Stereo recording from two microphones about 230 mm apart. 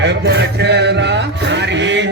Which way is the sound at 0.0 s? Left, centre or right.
Right.